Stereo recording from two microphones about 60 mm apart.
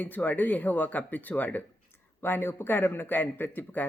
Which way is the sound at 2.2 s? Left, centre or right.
Left.